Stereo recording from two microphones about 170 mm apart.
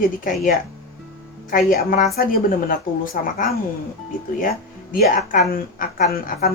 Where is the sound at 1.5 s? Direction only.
55° left (ahead or behind).